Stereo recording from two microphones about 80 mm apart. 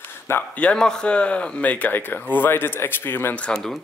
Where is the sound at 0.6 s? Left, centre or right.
Centre; by 3.3 s left.